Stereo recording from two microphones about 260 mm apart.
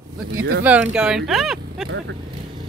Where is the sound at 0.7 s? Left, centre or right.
Centre.